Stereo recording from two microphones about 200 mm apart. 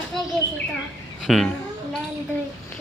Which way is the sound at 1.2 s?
Centre (ahead or behind).